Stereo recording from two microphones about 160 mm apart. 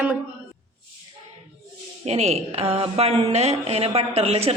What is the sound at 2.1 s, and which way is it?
A woman's voice, 40° right (ahead or behind).